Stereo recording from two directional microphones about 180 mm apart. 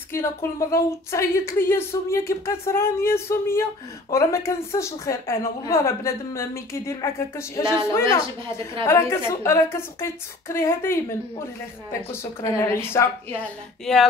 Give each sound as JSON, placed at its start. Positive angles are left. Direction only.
{"t": 0.1, "sound": "a woman's voice", "side_deg": 15}